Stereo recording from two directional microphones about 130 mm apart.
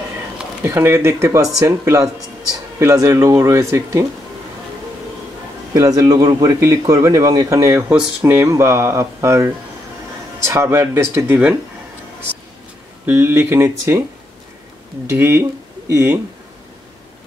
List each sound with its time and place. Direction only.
0.7 s speech: 20° right (ahead or behind)
5.7 s speech: 25° right (ahead or behind)
13.0 s speech: 15° right (ahead or behind)
15.0 s speech: 20° right (ahead or behind)